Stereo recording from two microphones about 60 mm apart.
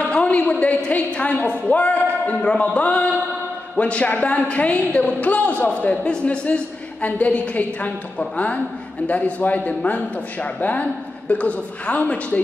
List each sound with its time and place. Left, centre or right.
0.3 s a man's voice: left